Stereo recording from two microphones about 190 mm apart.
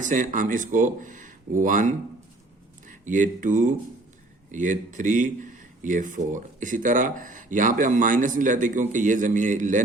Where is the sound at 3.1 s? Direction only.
45° right (ahead or behind).